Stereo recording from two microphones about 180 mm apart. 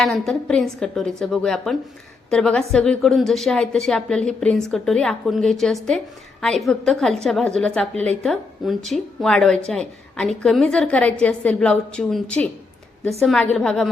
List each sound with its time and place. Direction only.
0.0 s a woman's voice: centre (ahead or behind)